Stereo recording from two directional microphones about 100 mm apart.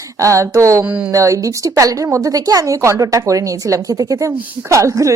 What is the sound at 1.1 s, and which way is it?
A woman's voice, 30° right (ahead or behind).